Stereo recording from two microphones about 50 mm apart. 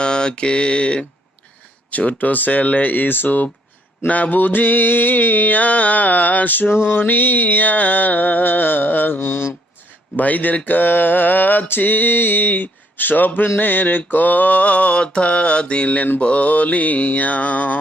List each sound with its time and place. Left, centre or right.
0.0 s mantra: centre; by 6.7 s left
6.7 s mantra: left
10.2 s mantra: left